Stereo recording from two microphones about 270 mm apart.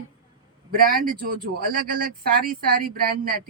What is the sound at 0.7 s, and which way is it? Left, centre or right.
Speech, right.